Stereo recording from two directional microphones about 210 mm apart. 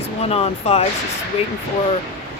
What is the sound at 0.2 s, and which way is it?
Speech, 30° left (ahead or behind).